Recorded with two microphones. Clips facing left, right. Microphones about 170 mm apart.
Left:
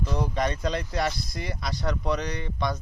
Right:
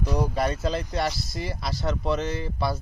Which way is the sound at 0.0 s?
10° right (ahead or behind).